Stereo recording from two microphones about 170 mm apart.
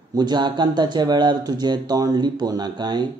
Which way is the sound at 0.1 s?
25° right (ahead or behind).